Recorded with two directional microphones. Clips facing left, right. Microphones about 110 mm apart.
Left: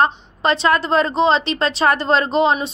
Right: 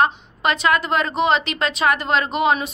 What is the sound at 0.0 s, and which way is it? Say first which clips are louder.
A woman's voice: left 1 dB; 30° left (ahead or behind).